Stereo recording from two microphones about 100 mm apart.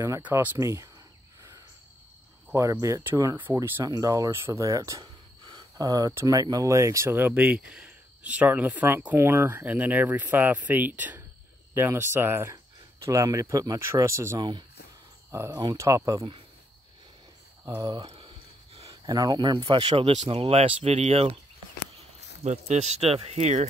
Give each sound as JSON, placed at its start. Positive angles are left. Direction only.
{"t": 0.6, "sound": "speech", "side_deg": -30}
{"t": 2.5, "sound": "speech", "side_deg": -30}
{"t": 3.5, "sound": "speech", "side_deg": -15}
{"t": 3.8, "sound": "speech", "side_deg": -35}
{"t": 7.2, "sound": "speech", "side_deg": -15}
{"t": 13.0, "sound": "speech", "side_deg": -35}
{"t": 15.5, "sound": "speech", "side_deg": -45}
{"t": 15.8, "sound": "speech", "side_deg": -35}
{"t": 18.0, "sound": "a sound", "side_deg": -70}
{"t": 18.9, "sound": "speech", "side_deg": -40}
{"t": 19.9, "sound": "speech", "side_deg": -80}
{"t": 22.4, "sound": "speech", "side_deg": -90}